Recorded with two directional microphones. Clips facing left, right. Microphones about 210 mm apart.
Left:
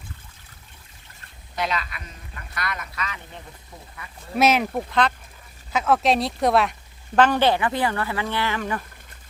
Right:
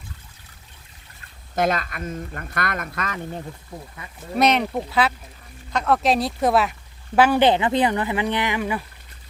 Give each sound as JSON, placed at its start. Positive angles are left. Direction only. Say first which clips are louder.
{"t": 1.5, "sound": "speech", "louder": "right 6 dB", "side_deg": -45}
{"t": 4.4, "sound": "speech", "louder": "even", "side_deg": 5}